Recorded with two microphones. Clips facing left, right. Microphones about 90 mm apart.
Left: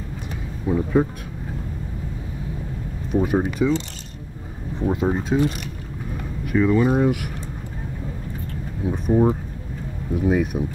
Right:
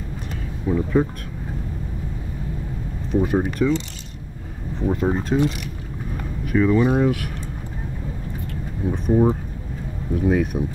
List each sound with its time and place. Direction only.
0.7 s speech: 15° left (ahead or behind)
3.1 s speech: 5° left (ahead or behind)
5.0 s speech: centre (ahead or behind)
8.8 s speech: 5° left (ahead or behind)